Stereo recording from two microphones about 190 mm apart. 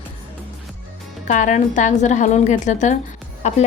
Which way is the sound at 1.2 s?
40° left (ahead or behind).